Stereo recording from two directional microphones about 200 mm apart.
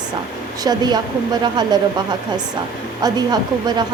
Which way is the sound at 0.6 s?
20° right (ahead or behind).